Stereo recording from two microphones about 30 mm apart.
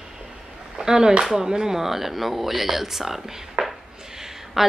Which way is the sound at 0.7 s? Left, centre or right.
Centre.